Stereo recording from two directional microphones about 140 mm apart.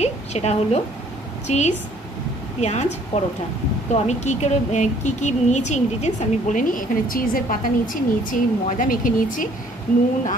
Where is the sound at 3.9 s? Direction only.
55° left (ahead or behind).